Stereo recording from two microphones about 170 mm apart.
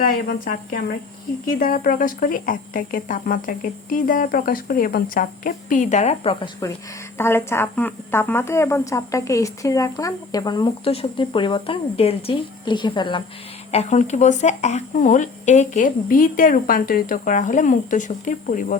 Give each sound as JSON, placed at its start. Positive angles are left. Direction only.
{"t": 0.1, "sound": "a woman's voice", "side_deg": 55}
{"t": 7.2, "sound": "speech", "side_deg": 15}
{"t": 13.7, "sound": "speech", "side_deg": 40}